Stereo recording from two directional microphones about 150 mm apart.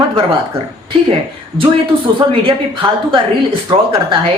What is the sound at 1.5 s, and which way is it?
Speech, 35° right (ahead or behind).